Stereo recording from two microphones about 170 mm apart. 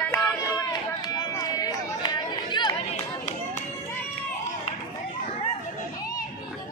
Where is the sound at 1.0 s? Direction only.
20° left (ahead or behind).